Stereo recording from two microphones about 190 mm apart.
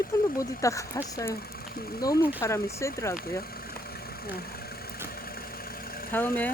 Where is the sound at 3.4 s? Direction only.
50° left (ahead or behind).